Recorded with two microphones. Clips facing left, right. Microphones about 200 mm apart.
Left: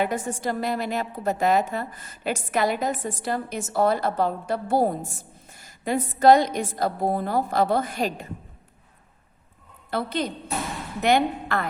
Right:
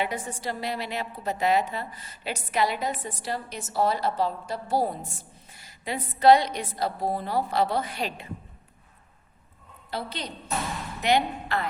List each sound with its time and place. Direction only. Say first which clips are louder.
0.0 s a woman's voice: left 5 dB; 45° left (ahead or behind)
9.9 s a woman's voice: left 7 dB; 50° left (ahead or behind)